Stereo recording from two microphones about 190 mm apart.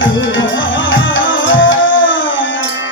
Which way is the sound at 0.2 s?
80° left.